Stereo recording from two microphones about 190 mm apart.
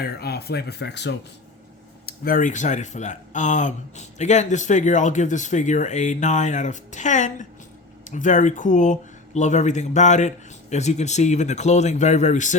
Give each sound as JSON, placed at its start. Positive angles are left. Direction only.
{"t": 0.0, "sound": "speech", "side_deg": 55}
{"t": 2.0, "sound": "speech", "side_deg": 50}